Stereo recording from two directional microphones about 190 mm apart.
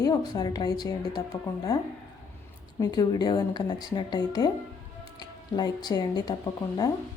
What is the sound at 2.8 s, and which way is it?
A woman's voice, 20° left (ahead or behind).